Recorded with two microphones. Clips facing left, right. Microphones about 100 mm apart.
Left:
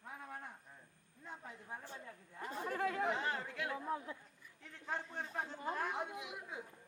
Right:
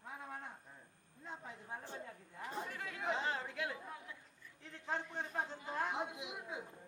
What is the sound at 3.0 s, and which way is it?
Chatter, 20° right (ahead or behind).